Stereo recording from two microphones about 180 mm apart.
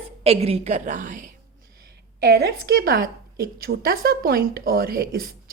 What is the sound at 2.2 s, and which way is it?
A woman's voice, 60° right (ahead or behind).